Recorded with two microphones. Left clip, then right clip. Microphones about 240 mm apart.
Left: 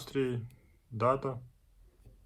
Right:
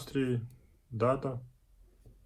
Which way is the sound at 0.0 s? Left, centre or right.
Left.